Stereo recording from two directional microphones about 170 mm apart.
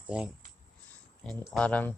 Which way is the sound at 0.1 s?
5° right (ahead or behind).